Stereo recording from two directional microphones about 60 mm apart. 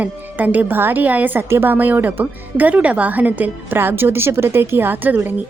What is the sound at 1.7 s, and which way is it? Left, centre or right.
A woman's voice, right.